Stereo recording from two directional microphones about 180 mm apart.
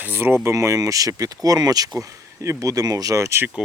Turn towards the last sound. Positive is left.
turn(degrees=-15)  # may be behind; listen again after turning